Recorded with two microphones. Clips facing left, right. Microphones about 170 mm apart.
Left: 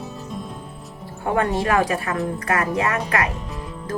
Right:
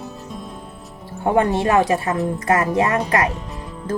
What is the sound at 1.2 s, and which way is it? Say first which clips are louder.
Speech: right 4 dB; 25° right (ahead or behind).